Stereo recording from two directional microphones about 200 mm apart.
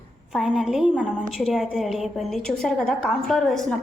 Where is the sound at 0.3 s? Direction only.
Centre (ahead or behind).